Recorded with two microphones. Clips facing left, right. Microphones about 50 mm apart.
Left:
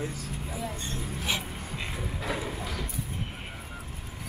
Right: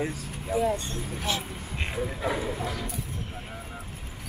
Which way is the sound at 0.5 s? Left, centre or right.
Right.